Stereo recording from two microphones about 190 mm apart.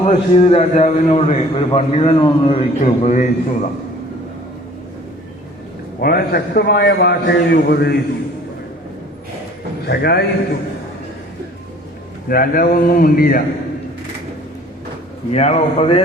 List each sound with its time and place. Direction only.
0.0 s a man's voice: 35° left (ahead or behind)
6.0 s a man's voice: 50° left (ahead or behind)
9.8 s a man's voice: 55° left (ahead or behind)
12.3 s speech: 50° left (ahead or behind)
15.3 s a man's voice: 35° left (ahead or behind)